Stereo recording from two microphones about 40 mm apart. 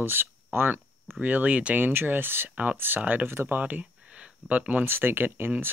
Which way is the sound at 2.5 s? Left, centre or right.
Right.